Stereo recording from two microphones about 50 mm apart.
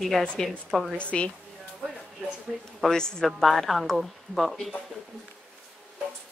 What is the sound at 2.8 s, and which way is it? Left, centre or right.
A woman's voice, centre.